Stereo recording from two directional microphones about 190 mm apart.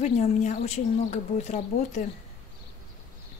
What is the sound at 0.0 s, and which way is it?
Speech, 35° left (ahead or behind).